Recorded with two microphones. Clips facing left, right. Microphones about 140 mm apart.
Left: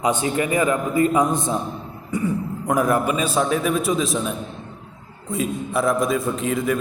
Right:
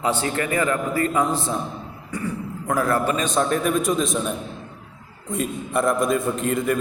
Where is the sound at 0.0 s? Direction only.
20° left (ahead or behind).